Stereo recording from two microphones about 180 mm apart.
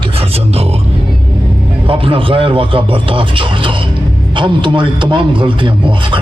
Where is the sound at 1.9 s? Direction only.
30° right (ahead or behind).